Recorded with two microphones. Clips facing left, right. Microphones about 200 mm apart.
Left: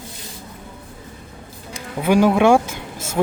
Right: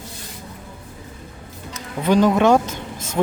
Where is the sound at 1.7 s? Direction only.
10° left (ahead or behind).